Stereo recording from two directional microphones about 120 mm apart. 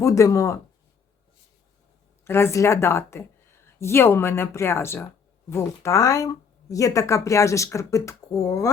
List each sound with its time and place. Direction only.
0.0 s speech: 25° left (ahead or behind)
2.2 s a woman's voice: 20° left (ahead or behind)